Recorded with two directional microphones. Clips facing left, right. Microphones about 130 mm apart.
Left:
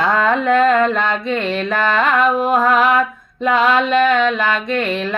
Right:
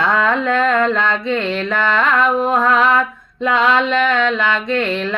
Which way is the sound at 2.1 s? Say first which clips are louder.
Left 1 dB; 10° left (ahead or behind).